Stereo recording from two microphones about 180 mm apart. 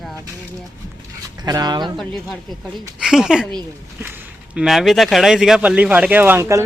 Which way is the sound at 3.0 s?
5° right (ahead or behind).